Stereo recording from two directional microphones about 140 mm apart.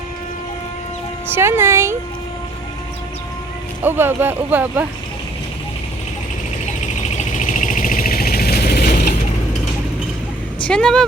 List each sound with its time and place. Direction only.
1.4 s speech: 15° right (ahead or behind)
3.8 s speech: 15° right (ahead or behind)
6.7 s a sound: 60° left (ahead or behind); by 9.0 s 90° left
10.7 s speech: 5° left (ahead or behind)